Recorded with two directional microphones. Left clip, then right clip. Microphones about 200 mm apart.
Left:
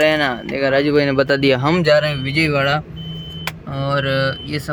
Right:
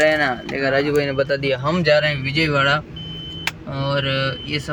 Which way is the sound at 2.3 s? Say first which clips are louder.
Left 2 dB; 10° left (ahead or behind).